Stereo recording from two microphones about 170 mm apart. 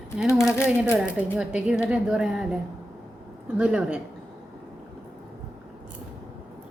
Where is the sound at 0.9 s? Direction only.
5° right (ahead or behind).